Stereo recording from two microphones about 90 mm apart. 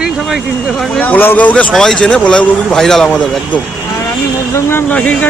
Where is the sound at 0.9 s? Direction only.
15° left (ahead or behind).